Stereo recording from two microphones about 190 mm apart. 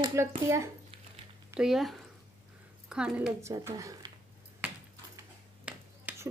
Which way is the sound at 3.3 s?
15° right (ahead or behind).